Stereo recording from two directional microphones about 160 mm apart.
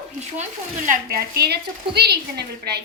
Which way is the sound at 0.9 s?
65° right (ahead or behind).